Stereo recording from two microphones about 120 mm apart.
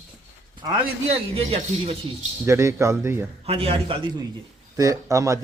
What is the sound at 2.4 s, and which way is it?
Speech, 25° right (ahead or behind).